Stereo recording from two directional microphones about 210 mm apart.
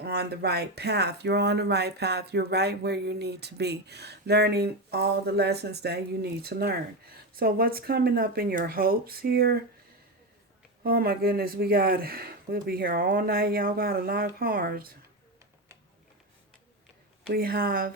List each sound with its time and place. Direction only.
0.0 s speech: 50° right (ahead or behind)
10.8 s speech: 45° right (ahead or behind)
17.3 s speech: 45° right (ahead or behind)